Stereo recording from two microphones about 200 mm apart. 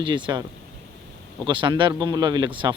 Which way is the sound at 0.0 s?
25° right (ahead or behind).